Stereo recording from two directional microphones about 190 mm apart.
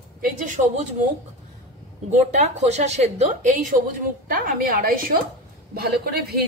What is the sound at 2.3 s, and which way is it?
A woman's voice, 35° right (ahead or behind).